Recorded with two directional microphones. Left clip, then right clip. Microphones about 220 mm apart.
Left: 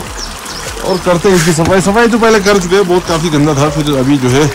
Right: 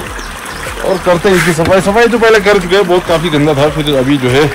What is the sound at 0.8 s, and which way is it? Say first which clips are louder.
Speech: right 1 dB; 30° left (ahead or behind).